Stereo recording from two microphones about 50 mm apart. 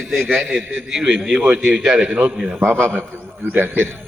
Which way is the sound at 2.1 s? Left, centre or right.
Right.